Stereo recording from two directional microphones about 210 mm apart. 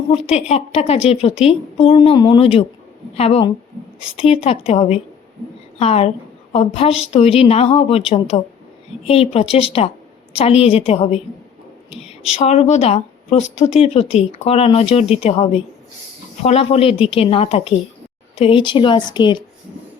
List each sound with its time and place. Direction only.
0.1 s a woman's voice: 30° left (ahead or behind)
12.0 s a sound: centre (ahead or behind)
12.4 s a woman's voice: 30° left (ahead or behind)